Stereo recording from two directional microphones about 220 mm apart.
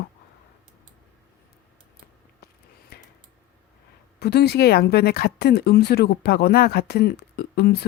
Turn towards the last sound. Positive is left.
turn(degrees=45)  # may be behind; listen again after turning